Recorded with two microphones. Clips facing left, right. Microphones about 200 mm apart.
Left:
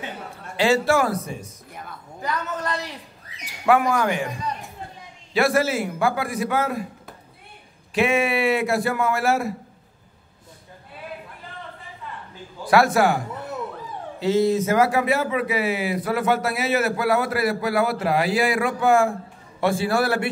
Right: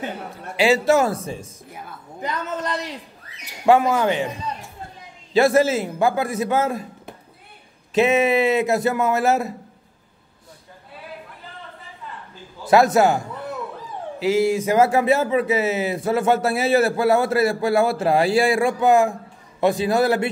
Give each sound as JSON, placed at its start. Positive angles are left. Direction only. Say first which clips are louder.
{"t": 0.6, "sound": "speech", "louder": "right 2 dB", "side_deg": -20}
{"t": 12.6, "sound": "speech", "louder": "right 3 dB", "side_deg": -20}
{"t": 14.2, "sound": "speech", "louder": "right 1 dB", "side_deg": -10}
{"t": 14.8, "sound": "speech", "louder": "right 3 dB", "side_deg": -25}